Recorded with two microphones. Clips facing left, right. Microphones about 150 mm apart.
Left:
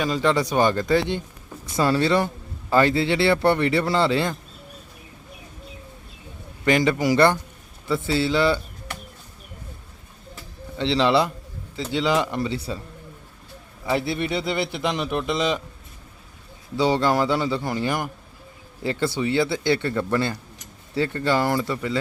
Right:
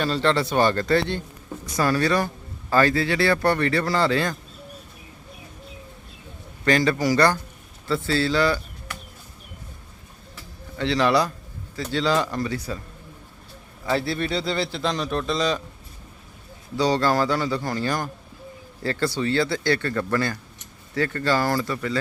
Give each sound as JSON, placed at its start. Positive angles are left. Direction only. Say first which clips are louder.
{"t": 0.0, "sound": "speech", "louder": "even", "side_deg": 10}
{"t": 6.7, "sound": "speech", "louder": "left 1 dB", "side_deg": 15}
{"t": 10.8, "sound": "speech", "louder": "left 1 dB", "side_deg": 25}
{"t": 13.8, "sound": "speech", "louder": "even", "side_deg": 20}
{"t": 16.7, "sound": "speech", "louder": "left 1 dB", "side_deg": 20}